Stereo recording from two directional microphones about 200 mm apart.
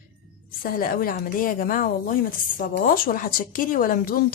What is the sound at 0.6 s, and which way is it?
Speech, 45° left (ahead or behind).